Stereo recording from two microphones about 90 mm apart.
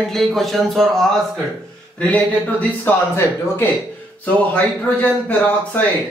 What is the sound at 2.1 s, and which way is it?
Speech, 20° left (ahead or behind).